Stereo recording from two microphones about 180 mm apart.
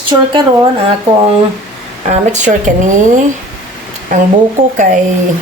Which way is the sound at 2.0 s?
40° right (ahead or behind).